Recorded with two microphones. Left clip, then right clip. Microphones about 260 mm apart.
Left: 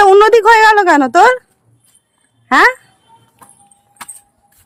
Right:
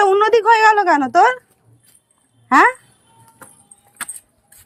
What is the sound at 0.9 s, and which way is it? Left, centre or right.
Speech, left.